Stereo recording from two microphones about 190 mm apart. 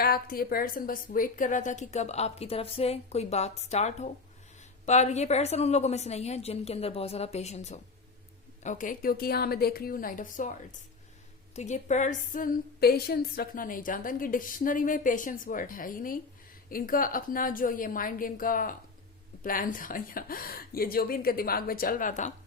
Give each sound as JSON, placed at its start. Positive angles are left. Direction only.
{"t": 0.0, "sound": "a woman's voice", "side_deg": 50}